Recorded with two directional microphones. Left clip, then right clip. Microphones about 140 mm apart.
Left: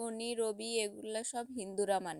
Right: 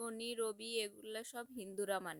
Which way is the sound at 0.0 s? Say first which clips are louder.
Left 5 dB; 20° left (ahead or behind).